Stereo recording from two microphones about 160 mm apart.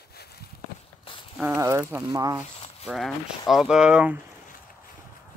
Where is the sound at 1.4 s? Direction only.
15° right (ahead or behind).